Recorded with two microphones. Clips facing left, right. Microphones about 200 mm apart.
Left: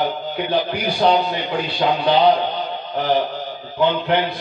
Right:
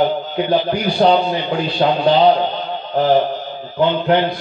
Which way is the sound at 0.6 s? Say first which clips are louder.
Right 4 dB; 35° right (ahead or behind).